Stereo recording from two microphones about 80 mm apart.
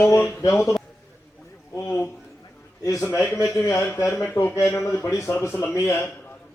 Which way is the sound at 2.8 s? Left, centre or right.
Left.